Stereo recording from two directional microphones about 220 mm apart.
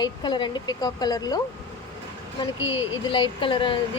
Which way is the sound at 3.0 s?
20° left (ahead or behind).